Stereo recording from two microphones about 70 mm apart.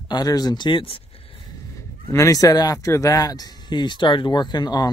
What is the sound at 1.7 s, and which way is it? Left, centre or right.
Speech, left.